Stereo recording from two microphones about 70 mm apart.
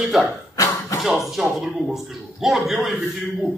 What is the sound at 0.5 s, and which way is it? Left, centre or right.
Cough, left.